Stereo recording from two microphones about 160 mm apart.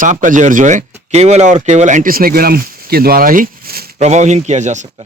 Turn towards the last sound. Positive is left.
turn(degrees=-50)  # may be behind; listen again after turning